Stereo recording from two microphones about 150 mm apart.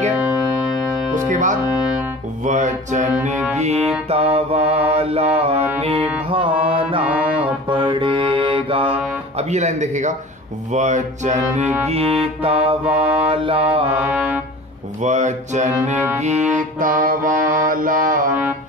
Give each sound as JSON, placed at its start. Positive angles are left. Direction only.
{"t": 1.3, "sound": "mantra", "side_deg": -60}
{"t": 3.5, "sound": "music", "side_deg": -45}
{"t": 4.1, "sound": "mantra", "side_deg": -40}
{"t": 7.0, "sound": "music", "side_deg": -10}
{"t": 7.7, "sound": "mantra", "side_deg": -35}
{"t": 9.4, "sound": "music", "side_deg": -45}
{"t": 11.9, "sound": "mantra", "side_deg": -40}
{"t": 12.8, "sound": "mantra", "side_deg": -10}
{"t": 13.3, "sound": "mantra", "side_deg": -35}
{"t": 13.9, "sound": "brass instrument", "side_deg": -10}
{"t": 15.0, "sound": "music", "side_deg": -50}
{"t": 16.2, "sound": "mantra", "side_deg": -50}